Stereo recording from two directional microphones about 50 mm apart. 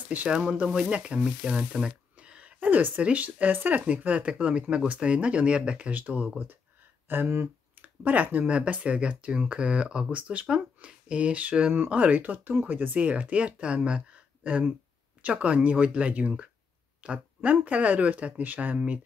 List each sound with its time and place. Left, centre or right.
0.1 s speech: right
5.9 s speech: right
12.9 s speech: right